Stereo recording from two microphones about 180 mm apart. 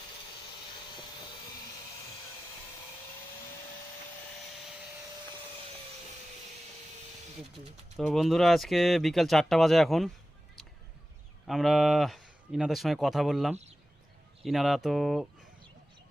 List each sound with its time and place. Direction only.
7.9 s speech: centre (ahead or behind)
11.4 s speech: centre (ahead or behind)